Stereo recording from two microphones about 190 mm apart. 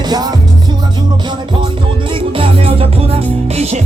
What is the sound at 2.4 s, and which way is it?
Music, 30° right (ahead or behind).